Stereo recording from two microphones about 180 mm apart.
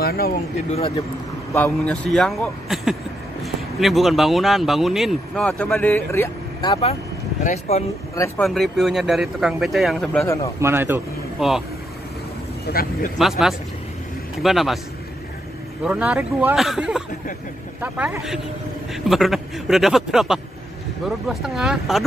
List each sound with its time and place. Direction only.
0.0 s speech: 60° left (ahead or behind)
0.7 s speech: 35° left (ahead or behind)
1.5 s speech: 10° left (ahead or behind)
6.6 s speech: 30° left (ahead or behind)
8.5 s speech: centre (ahead or behind)
10.2 s a man's voice: 15° left (ahead or behind)
10.6 s speech: 10° right (ahead or behind)
11.3 s speech: centre (ahead or behind)
12.6 s speech: 55° left (ahead or behind)
13.2 s speech: centre (ahead or behind)
15.8 s speech: 5° right (ahead or behind)